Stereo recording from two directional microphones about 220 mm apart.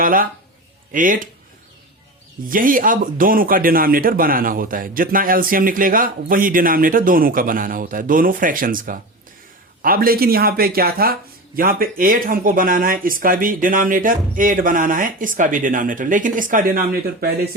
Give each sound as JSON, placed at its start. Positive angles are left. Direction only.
{"t": 0.0, "sound": "speech", "side_deg": -40}
{"t": 2.5, "sound": "speech", "side_deg": -40}